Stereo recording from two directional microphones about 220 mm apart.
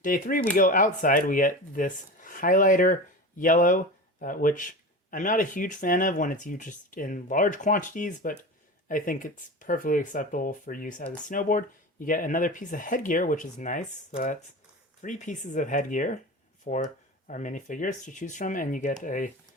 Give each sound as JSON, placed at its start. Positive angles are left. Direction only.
{"t": 0.0, "sound": "speech", "side_deg": 40}
{"t": 15.0, "sound": "speech", "side_deg": 35}